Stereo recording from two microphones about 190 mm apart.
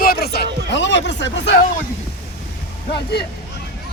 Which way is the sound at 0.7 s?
70° left (ahead or behind).